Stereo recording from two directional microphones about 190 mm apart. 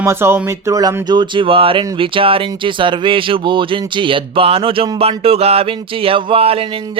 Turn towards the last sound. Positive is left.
turn(degrees=-30)  # may be behind; listen again after turning